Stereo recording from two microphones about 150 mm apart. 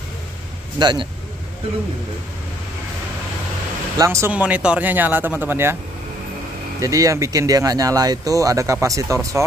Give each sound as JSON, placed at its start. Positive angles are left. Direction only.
{"t": 0.7, "sound": "speech", "side_deg": -30}
{"t": 4.0, "sound": "speech", "side_deg": -20}
{"t": 4.3, "sound": "speech", "side_deg": -10}
{"t": 6.8, "sound": "speech", "side_deg": -20}